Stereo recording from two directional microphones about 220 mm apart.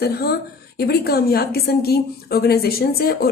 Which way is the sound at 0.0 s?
45° left (ahead or behind).